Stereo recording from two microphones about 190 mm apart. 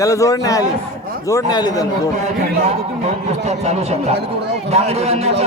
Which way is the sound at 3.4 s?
35° right (ahead or behind).